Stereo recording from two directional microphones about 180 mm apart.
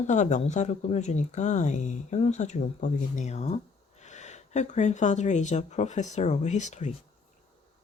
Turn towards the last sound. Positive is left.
turn(degrees=40)  # may be behind; listen again after turning